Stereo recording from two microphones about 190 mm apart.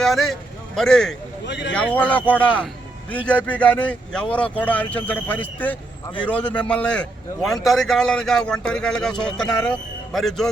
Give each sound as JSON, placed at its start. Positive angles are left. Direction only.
{"t": 0.0, "sound": "a man's voice", "side_deg": 0}
{"t": 1.5, "sound": "speech", "side_deg": 65}
{"t": 1.7, "sound": "a man's voice", "side_deg": 10}